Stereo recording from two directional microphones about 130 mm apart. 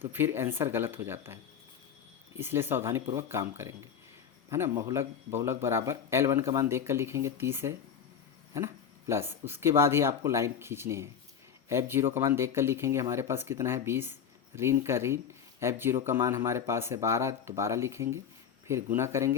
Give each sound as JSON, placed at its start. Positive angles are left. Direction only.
{"t": 0.1, "sound": "speech", "side_deg": -15}
{"t": 8.5, "sound": "a sound", "side_deg": -20}
{"t": 9.5, "sound": "speech", "side_deg": -20}